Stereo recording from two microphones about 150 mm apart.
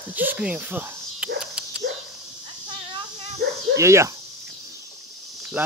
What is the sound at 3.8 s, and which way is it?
Speech, 20° right (ahead or behind).